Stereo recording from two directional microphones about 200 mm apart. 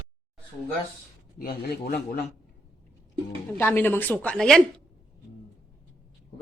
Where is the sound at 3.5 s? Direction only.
10° left (ahead or behind).